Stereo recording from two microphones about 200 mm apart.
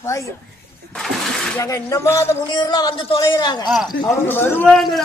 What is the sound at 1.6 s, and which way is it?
A man's voice, 15° left (ahead or behind).